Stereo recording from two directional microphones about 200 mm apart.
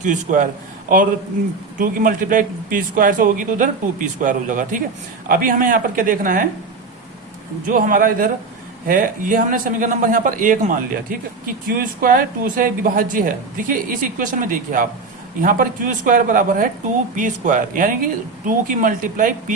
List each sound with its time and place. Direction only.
0.0 s a man's voice: 40° right (ahead or behind)
1.8 s a man's voice: 45° right (ahead or behind)
7.7 s a man's voice: 45° right (ahead or behind)